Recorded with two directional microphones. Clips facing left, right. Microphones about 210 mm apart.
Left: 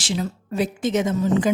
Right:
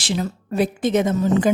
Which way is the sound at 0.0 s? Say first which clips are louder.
Right 2 dB; 55° right (ahead or behind).